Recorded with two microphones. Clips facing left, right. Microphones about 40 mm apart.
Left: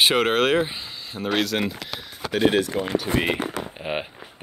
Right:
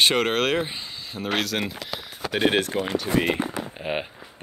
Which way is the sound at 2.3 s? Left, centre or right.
Right.